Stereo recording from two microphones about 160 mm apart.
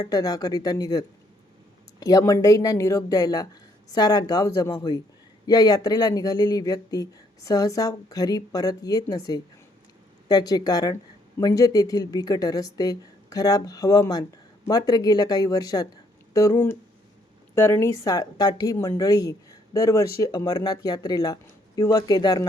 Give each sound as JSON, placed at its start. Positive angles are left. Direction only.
{"t": 0.0, "sound": "speech", "side_deg": 25}